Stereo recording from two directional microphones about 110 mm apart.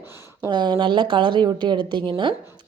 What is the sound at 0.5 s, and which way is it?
A woman's voice, 45° right (ahead or behind).